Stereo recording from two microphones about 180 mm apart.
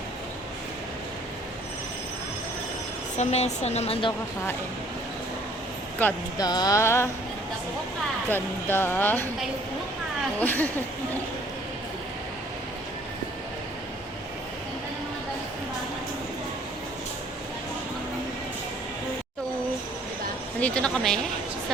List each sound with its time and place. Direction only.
3.2 s speech: 40° left (ahead or behind)
6.0 s speech: 10° left (ahead or behind)
6.4 s a sound: 20° left (ahead or behind)
8.3 s speech: 10° left (ahead or behind)
10.4 s speech: 10° left (ahead or behind)
20.6 s speech: 5° left (ahead or behind)